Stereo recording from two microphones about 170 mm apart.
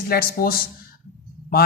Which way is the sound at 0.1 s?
60° left (ahead or behind).